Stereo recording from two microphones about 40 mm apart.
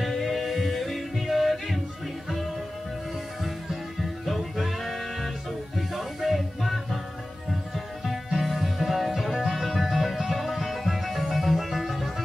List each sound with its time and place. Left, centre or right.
0.0 s music: centre
4.3 s music: centre